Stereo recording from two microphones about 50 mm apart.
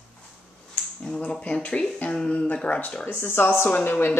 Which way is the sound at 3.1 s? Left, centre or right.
Left.